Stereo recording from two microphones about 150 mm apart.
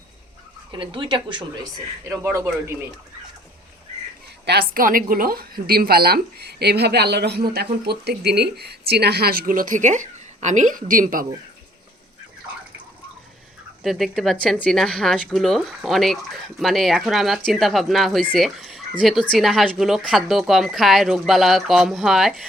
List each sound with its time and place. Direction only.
0.7 s speech: 35° right (ahead or behind)
2.0 s a man's voice: 20° right (ahead or behind)
4.4 s a woman's voice: 90° right; by 11.3 s 65° right (ahead or behind)
13.8 s speech: centre (ahead or behind)